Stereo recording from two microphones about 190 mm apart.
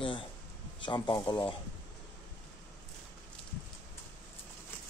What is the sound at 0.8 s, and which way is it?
Speech, 25° left (ahead or behind).